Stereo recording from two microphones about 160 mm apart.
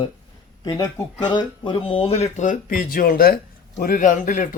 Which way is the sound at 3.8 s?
55° left (ahead or behind).